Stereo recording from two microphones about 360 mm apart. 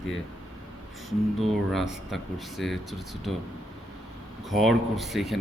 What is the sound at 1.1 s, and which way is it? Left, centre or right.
Speech, centre.